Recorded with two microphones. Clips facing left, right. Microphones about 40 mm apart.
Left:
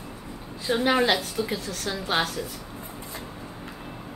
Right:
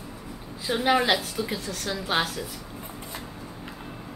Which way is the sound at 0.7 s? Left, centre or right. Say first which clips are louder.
Even; centre.